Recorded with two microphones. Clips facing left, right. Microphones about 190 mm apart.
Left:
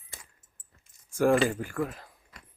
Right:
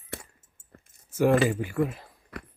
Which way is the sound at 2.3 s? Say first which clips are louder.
Right 17 dB; 65° right (ahead or behind).